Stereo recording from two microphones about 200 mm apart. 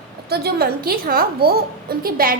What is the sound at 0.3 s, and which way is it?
A woman's voice, 50° right (ahead or behind).